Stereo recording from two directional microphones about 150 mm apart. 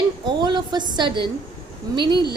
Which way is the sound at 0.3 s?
30° right (ahead or behind).